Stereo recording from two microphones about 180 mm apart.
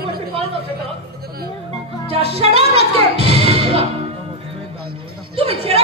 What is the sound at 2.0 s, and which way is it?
Music, 35° right (ahead or behind).